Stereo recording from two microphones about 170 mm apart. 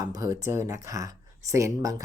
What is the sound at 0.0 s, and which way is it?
Speech, 20° right (ahead or behind).